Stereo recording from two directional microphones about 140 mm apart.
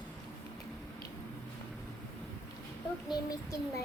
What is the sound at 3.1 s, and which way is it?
Speech, 25° left (ahead or behind).